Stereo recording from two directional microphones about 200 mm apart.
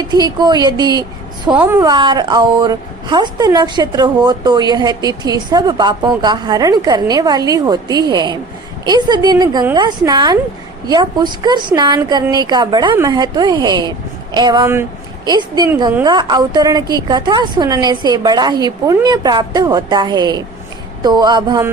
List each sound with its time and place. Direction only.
0.0 s a woman's voice: 20° right (ahead or behind)